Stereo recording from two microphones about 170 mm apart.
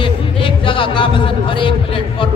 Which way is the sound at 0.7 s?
30° left (ahead or behind).